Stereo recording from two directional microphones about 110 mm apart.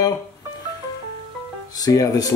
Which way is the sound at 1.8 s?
35° left (ahead or behind).